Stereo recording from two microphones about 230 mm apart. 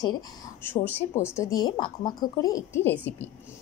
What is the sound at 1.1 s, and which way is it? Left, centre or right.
Speech, centre.